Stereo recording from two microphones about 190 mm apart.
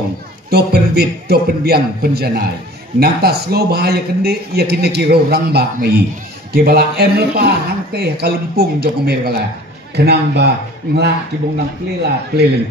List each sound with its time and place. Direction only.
0.5 s a man's voice: 55° right (ahead or behind)